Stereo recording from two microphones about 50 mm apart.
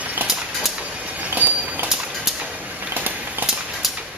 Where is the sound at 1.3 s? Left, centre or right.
Right.